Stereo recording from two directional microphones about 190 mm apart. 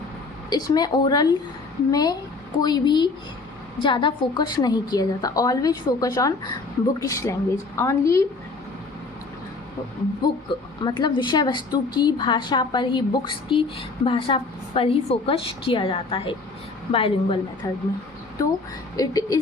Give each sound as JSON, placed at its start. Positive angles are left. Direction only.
{"t": 0.5, "sound": "a woman's voice", "side_deg": 20}
{"t": 10.2, "sound": "a woman's voice", "side_deg": 20}
{"t": 17.6, "sound": "a woman's voice", "side_deg": 20}
{"t": 18.9, "sound": "a woman's voice", "side_deg": 20}